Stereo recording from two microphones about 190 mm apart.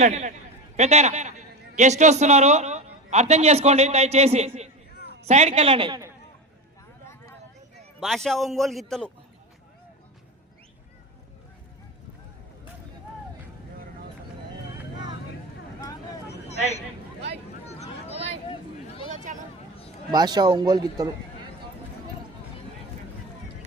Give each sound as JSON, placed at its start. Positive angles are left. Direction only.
{"t": 0.0, "sound": "a woman's voice", "side_deg": -35}
{"t": 8.0, "sound": "a man's voice", "side_deg": 0}
{"t": 18.1, "sound": "a sound", "side_deg": -35}
{"t": 20.1, "sound": "speech", "side_deg": -20}